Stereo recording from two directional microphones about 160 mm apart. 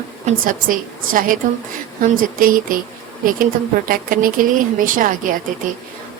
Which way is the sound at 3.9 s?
60° right (ahead or behind).